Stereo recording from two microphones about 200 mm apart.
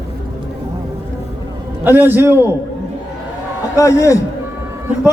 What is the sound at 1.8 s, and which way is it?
Speech, 10° right (ahead or behind).